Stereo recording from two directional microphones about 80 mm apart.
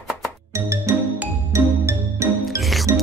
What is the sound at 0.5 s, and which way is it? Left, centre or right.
Music, right.